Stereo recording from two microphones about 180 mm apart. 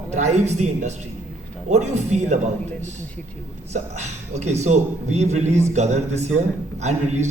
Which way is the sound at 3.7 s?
40° right (ahead or behind).